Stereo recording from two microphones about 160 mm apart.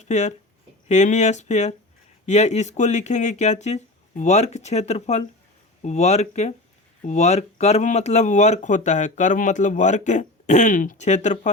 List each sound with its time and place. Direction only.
0.0 s speech: 45° left (ahead or behind)